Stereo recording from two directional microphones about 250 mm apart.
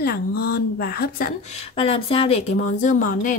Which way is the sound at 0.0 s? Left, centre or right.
Left.